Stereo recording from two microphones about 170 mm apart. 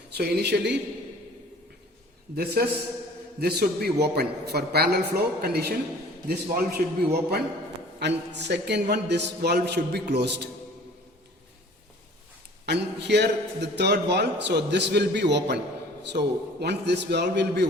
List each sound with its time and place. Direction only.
0.1 s a man's voice: 75° right (ahead or behind)
2.3 s a man's voice: 65° right (ahead or behind)
7.9 s a man's voice: 85° right
12.6 s a man's voice: 80° right